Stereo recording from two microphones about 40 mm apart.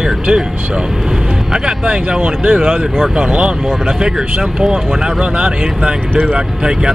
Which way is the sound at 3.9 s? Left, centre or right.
Centre.